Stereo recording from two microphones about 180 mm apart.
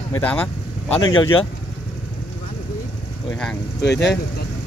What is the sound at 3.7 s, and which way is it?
Speech, 70° left (ahead or behind).